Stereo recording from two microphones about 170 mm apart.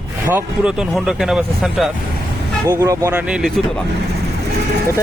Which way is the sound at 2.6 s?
20° right (ahead or behind).